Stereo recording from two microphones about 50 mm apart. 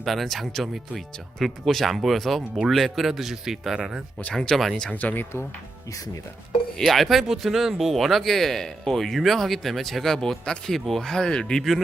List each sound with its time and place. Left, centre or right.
0.0 s speech: centre
4.5 s speech: centre
4.9 s speech: left
6.7 s speech: centre